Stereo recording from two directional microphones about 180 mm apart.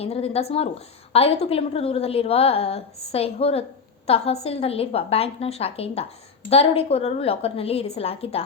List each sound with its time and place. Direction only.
0.0 s a woman's voice: 35° left (ahead or behind)